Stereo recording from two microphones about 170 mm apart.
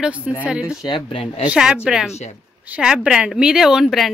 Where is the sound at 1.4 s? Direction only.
5° right (ahead or behind).